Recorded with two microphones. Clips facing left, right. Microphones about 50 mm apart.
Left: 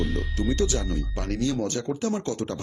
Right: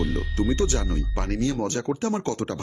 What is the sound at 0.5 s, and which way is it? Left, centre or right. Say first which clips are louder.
Speech: right 1 dB; right.